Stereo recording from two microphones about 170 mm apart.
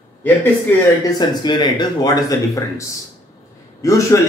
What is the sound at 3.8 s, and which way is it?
Speech, 20° left (ahead or behind).